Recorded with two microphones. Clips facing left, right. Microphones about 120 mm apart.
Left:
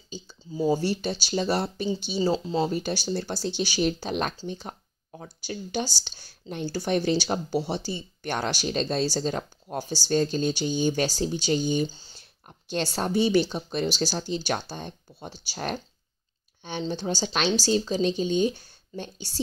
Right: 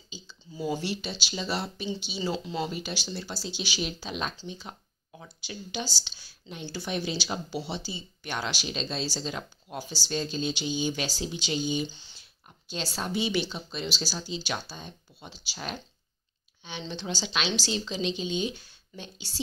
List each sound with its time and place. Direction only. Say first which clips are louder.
0.6 s speech: left 7 dB; 30° left (ahead or behind)
1.2 s speech: left 7 dB; 45° left (ahead or behind)